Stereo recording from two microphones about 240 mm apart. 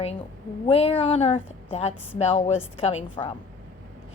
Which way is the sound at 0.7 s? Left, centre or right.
Left.